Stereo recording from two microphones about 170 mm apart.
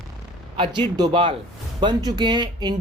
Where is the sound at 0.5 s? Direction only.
30° right (ahead or behind).